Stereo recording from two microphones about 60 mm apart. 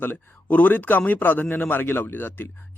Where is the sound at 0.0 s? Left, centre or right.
Left.